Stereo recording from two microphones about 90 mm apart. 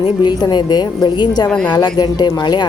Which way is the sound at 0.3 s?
50° left (ahead or behind).